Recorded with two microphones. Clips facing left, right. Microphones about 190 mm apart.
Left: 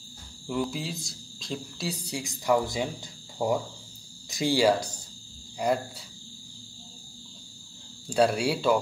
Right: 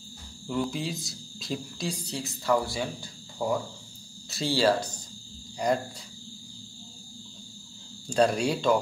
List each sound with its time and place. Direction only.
0.5 s speech: 5° left (ahead or behind)
2.0 s speech: 15° left (ahead or behind)
8.1 s speech: 5° left (ahead or behind)